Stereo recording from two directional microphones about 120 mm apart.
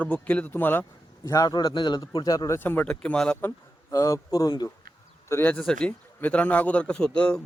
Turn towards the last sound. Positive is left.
turn(degrees=10)  # may be behind; listen again after turning